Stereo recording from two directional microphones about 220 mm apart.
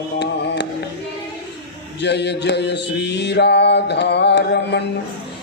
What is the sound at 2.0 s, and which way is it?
Speech, 50° left (ahead or behind).